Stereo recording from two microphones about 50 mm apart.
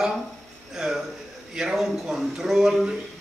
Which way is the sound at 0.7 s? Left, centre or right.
Centre.